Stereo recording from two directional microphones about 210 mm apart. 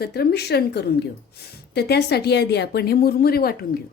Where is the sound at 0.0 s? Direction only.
50° left (ahead or behind).